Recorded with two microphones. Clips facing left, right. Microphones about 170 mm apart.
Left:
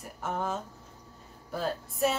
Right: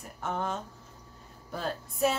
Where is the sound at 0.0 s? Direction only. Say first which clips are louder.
Even; 5° left (ahead or behind).